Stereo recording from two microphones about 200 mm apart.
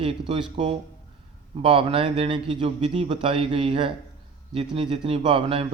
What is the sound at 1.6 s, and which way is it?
A man's voice, 30° right (ahead or behind).